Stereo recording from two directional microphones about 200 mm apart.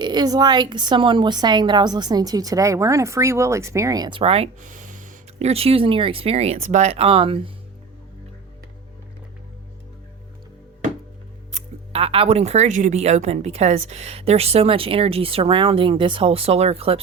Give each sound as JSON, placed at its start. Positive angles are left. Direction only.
{"t": 0.0, "sound": "a woman's voice", "side_deg": -20}
{"t": 11.5, "sound": "speech", "side_deg": -30}